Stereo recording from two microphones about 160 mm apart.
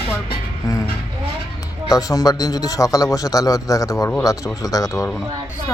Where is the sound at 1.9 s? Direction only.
20° left (ahead or behind).